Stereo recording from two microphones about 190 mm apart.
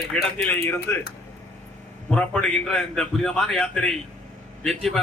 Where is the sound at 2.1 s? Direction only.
5° left (ahead or behind).